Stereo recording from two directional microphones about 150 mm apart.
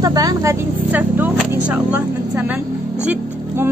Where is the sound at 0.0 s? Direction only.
25° right (ahead or behind).